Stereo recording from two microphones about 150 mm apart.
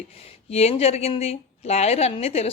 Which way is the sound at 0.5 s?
45° left (ahead or behind).